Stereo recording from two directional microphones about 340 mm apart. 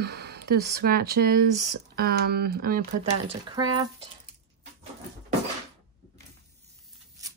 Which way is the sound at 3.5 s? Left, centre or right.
Centre.